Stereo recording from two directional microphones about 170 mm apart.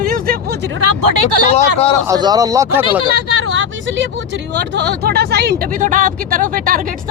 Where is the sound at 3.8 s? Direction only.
90° right; by 6.8 s 55° right (ahead or behind).